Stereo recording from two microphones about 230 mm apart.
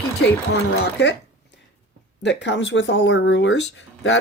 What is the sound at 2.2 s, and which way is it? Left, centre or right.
Speech, left.